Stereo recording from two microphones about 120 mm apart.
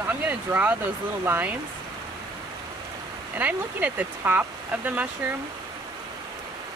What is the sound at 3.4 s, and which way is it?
Speech, 15° right (ahead or behind).